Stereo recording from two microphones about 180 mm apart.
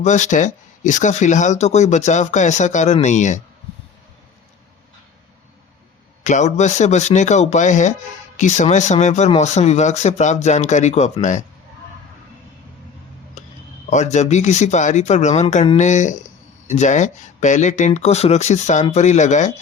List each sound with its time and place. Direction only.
0.0 s speech: 40° left (ahead or behind)
6.2 s speech: 40° left (ahead or behind)
13.4 s a sound: 40° left (ahead or behind)
13.9 s speech: 40° left (ahead or behind)